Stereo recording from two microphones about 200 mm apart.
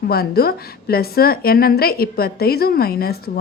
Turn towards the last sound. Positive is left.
turn(degrees=50)  # may be behind; listen again after turning